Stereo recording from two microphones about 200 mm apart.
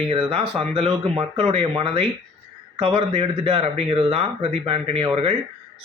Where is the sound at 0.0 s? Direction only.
30° right (ahead or behind).